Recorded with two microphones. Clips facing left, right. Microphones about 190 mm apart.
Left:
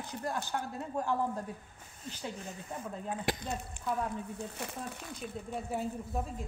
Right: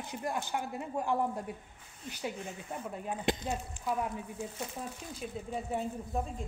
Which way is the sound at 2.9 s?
20° right (ahead or behind).